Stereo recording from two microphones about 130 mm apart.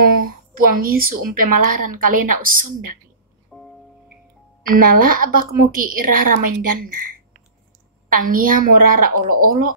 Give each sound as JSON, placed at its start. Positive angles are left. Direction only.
{"t": 0.2, "sound": "speech", "side_deg": -90}
{"t": 3.4, "sound": "music", "side_deg": 0}
{"t": 4.7, "sound": "speech", "side_deg": -90}
{"t": 8.1, "sound": "speech", "side_deg": -90}